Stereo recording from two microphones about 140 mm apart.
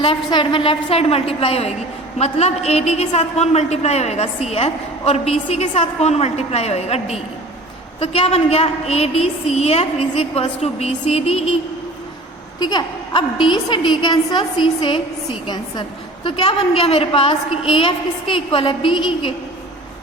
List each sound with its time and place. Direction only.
0.0 s a woman's voice: 40° left (ahead or behind)
12.5 s a woman's voice: 30° left (ahead or behind)
16.2 s a woman's voice: 45° left (ahead or behind)